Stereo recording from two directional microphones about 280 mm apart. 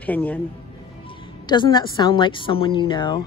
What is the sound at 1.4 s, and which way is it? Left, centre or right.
A woman's voice, centre.